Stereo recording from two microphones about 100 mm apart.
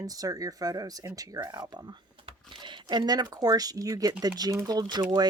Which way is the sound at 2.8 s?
40° right (ahead or behind).